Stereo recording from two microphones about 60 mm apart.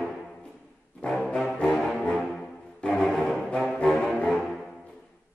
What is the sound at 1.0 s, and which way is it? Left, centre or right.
Music, centre.